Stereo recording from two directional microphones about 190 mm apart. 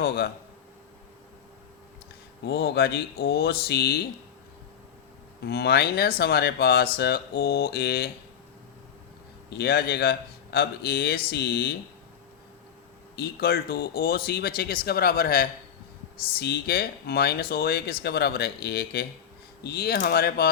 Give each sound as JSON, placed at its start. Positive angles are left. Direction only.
{"t": 2.4, "sound": "speech", "side_deg": 60}
{"t": 5.4, "sound": "speech", "side_deg": 60}
{"t": 9.5, "sound": "speech", "side_deg": 55}
{"t": 13.1, "sound": "speech", "side_deg": 55}